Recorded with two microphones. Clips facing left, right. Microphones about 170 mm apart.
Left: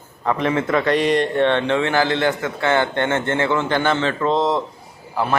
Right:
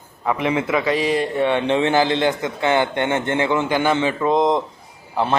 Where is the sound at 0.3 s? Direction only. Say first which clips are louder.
Left 1 dB; 10° right (ahead or behind).